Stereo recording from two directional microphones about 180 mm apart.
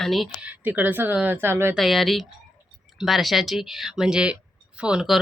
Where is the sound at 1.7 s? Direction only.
Centre (ahead or behind).